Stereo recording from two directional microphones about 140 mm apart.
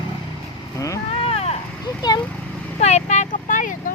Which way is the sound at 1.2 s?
45° left (ahead or behind).